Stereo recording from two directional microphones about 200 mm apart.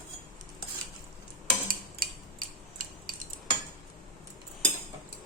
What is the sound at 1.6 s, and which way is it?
Cutlery, 45° right (ahead or behind).